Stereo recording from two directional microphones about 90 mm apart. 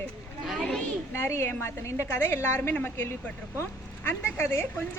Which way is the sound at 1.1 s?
30° left (ahead or behind).